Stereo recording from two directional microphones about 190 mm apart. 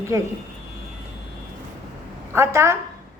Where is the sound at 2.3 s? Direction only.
15° right (ahead or behind).